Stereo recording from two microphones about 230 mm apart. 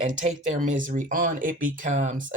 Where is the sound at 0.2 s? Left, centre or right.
Right.